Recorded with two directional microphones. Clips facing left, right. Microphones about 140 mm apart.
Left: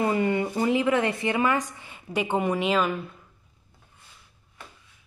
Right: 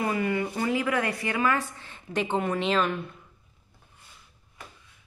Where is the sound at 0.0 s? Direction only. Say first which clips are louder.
Left 3 dB; 25° left (ahead or behind); by 3.0 s 10° left (ahead or behind).